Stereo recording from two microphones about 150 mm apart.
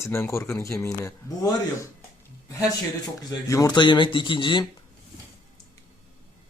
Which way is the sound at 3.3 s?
20° left (ahead or behind).